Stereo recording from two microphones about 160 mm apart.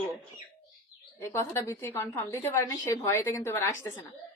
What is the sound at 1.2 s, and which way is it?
A woman's voice, 15° left (ahead or behind).